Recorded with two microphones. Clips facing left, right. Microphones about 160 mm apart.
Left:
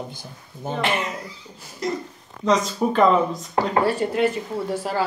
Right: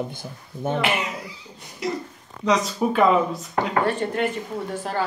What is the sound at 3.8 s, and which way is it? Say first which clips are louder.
Speech: left 3 dB; 10° left (ahead or behind).